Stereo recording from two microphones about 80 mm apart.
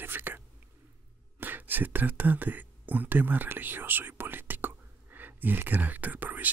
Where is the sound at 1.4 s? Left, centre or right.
Right.